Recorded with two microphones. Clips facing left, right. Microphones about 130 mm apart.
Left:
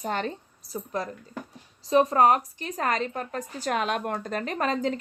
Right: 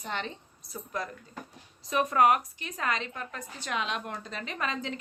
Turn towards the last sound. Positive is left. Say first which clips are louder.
# left 7 dB
turn(degrees=40)  # may be behind; listen again after turning